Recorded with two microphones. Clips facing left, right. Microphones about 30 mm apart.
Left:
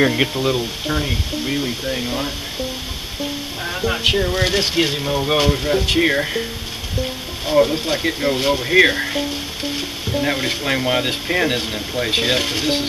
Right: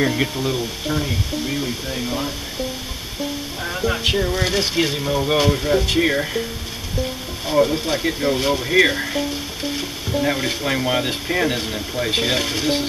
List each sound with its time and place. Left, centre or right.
0.0 s speech: centre
0.4 s sizzle: left
3.6 s speech: centre
4.4 s sizzle: left
5.0 s speech: centre
7.4 s speech: centre
9.6 s sizzle: centre